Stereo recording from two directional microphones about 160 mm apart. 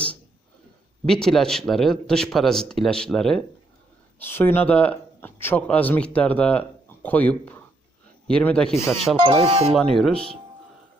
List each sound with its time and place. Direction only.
1.0 s speech: 5° left (ahead or behind)
4.2 s speech: 15° left (ahead or behind)
9.1 s speech: 30° right (ahead or behind)
9.7 s speech: centre (ahead or behind)